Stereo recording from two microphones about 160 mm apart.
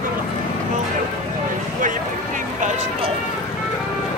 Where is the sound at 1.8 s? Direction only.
55° right (ahead or behind).